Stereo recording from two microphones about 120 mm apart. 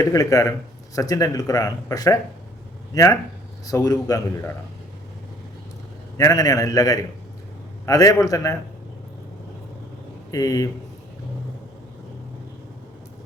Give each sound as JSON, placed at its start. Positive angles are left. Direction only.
{"t": 0.0, "sound": "speech", "side_deg": 25}
{"t": 6.1, "sound": "speech", "side_deg": 30}
{"t": 10.3, "sound": "speech", "side_deg": 30}